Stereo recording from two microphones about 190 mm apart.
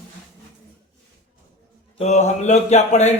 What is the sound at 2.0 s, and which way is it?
Speech, 35° left (ahead or behind).